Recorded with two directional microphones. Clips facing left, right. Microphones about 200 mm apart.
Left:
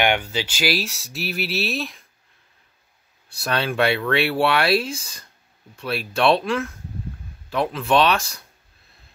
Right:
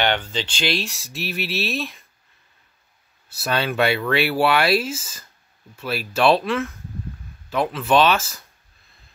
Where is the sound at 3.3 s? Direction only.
Centre (ahead or behind).